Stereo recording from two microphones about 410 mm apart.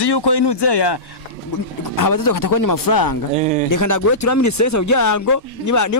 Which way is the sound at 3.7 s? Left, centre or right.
Left.